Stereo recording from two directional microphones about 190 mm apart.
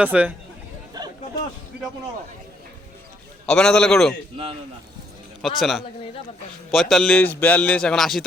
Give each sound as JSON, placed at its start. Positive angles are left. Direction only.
{"t": 0.0, "sound": "speech", "side_deg": -5}
{"t": 1.0, "sound": "chatter", "side_deg": -20}
{"t": 3.4, "sound": "a man's voice", "side_deg": 5}
{"t": 5.4, "sound": "a man's voice", "side_deg": 0}